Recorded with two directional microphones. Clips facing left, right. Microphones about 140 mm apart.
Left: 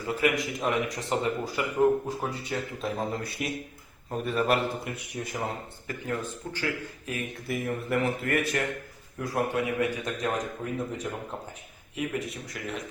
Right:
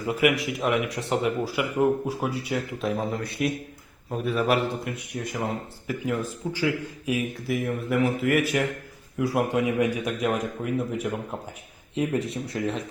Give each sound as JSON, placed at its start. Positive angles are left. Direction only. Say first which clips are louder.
{"t": 0.0, "sound": "a man's voice", "louder": "right 4 dB", "side_deg": -15}
{"t": 9.2, "sound": "a man's voice", "louder": "right 4 dB", "side_deg": -15}
{"t": 11.9, "sound": "speech", "louder": "right 6 dB", "side_deg": -30}